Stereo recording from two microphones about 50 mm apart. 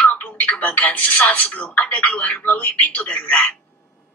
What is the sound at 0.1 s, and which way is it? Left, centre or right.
Speech, left.